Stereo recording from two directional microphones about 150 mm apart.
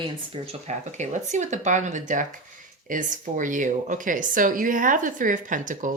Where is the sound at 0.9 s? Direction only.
55° right (ahead or behind).